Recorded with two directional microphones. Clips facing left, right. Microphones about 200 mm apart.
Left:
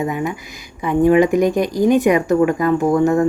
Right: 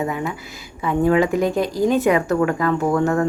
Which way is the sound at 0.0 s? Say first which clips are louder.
Left 3 dB; 15° left (ahead or behind).